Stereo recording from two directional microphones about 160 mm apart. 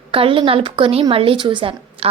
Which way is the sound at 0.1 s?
35° right (ahead or behind).